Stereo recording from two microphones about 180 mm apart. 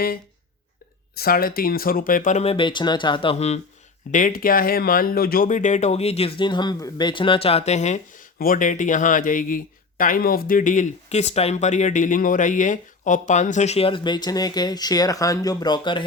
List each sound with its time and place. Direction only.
1.1 s speech: 55° left (ahead or behind); by 3.6 s 35° left (ahead or behind)
4.1 s speech: 50° left (ahead or behind); by 16.0 s 25° left (ahead or behind)